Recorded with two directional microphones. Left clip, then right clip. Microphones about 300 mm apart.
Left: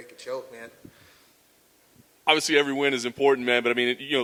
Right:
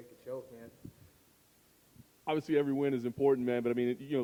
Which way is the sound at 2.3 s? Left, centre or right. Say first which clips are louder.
Left 10 dB; centre.